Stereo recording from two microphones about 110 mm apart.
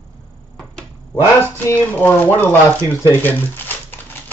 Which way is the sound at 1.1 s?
20° left (ahead or behind).